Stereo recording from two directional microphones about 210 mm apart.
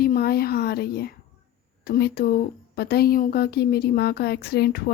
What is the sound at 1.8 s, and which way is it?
Speech, 50° left (ahead or behind).